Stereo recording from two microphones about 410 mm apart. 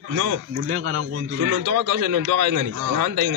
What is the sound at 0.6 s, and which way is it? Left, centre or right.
Speech, right.